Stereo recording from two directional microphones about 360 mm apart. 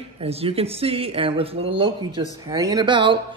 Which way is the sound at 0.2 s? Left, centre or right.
Centre.